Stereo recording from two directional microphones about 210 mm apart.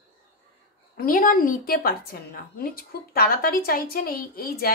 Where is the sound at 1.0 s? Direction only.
40° left (ahead or behind).